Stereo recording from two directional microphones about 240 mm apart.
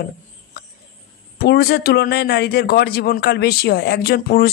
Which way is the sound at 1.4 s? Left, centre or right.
Left.